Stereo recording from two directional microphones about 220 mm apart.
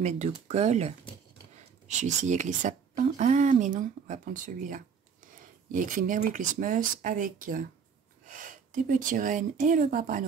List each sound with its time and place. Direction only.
0.0 s speech: 30° right (ahead or behind)
2.2 s speech: 35° right (ahead or behind)